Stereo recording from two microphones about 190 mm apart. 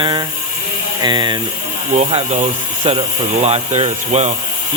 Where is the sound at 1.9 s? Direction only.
35° right (ahead or behind).